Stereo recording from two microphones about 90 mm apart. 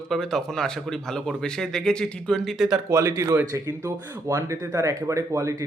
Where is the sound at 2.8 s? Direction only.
35° right (ahead or behind).